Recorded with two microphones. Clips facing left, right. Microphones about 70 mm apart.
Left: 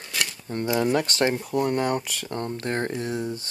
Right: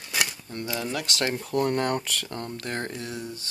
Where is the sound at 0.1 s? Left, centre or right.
Centre.